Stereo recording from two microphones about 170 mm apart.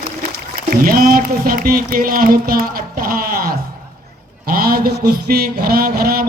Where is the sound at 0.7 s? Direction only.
60° right (ahead or behind).